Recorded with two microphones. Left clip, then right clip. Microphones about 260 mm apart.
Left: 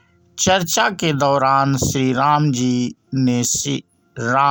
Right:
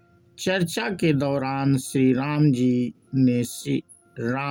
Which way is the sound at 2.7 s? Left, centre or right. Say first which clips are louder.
Left 4 dB; left.